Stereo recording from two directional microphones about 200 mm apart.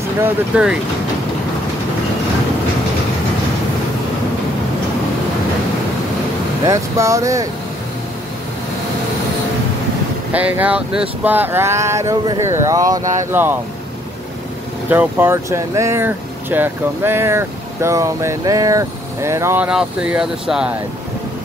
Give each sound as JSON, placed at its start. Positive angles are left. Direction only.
{"t": 0.2, "sound": "speech", "side_deg": -5}
{"t": 6.6, "sound": "speech", "side_deg": -15}
{"t": 10.3, "sound": "speech", "side_deg": -10}
{"t": 14.9, "sound": "speech", "side_deg": -10}